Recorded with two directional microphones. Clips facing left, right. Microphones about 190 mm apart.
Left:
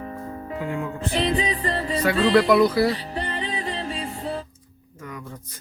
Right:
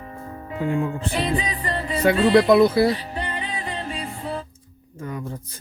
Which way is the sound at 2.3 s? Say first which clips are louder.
Right 2 dB; 25° right (ahead or behind).